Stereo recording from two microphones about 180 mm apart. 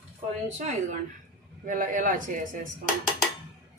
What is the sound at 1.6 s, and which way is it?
Speech, 45° right (ahead or behind).